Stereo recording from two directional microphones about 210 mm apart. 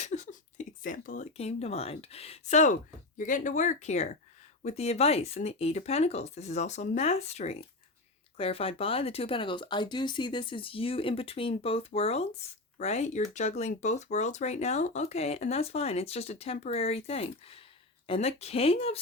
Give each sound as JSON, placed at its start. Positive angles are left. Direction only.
{"t": 0.0, "sound": "speech", "side_deg": 35}